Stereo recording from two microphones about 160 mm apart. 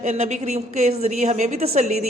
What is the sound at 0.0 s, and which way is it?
Speech, 45° right (ahead or behind).